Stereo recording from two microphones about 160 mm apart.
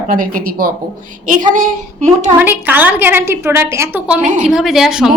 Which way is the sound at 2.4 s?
10° right (ahead or behind).